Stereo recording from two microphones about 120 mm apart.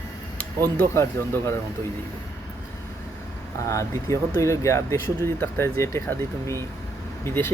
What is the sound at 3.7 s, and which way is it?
Speech, 25° left (ahead or behind).